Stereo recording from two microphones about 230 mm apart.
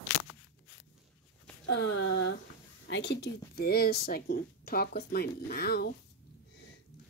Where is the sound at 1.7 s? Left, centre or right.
Left.